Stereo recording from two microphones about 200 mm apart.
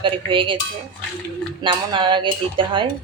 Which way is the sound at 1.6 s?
25° right (ahead or behind).